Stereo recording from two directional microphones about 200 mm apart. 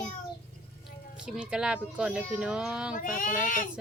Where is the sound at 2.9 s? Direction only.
40° left (ahead or behind).